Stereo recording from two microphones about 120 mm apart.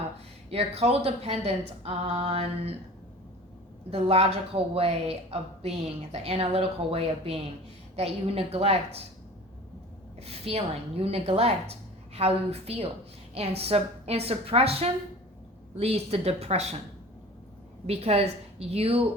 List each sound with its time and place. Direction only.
0.5 s speech: 60° right (ahead or behind)
3.9 s speech: 60° right (ahead or behind)
10.2 s speech: 55° right (ahead or behind)
17.8 s speech: 60° right (ahead or behind)